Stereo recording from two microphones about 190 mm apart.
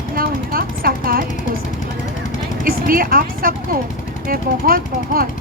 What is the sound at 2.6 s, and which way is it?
Speech, 50° right (ahead or behind).